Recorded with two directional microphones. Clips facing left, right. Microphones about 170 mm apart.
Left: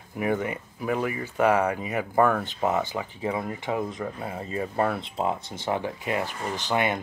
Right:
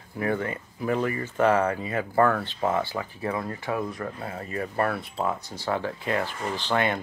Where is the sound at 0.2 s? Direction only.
15° left (ahead or behind).